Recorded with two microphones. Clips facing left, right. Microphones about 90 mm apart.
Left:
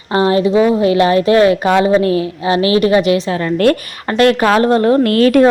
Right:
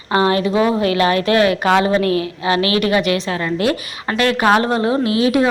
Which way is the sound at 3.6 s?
45° left (ahead or behind).